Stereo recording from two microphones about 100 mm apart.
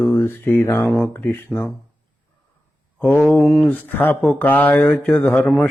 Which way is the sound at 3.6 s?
15° left (ahead or behind).